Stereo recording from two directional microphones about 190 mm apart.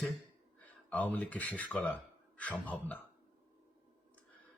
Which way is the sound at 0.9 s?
5° left (ahead or behind).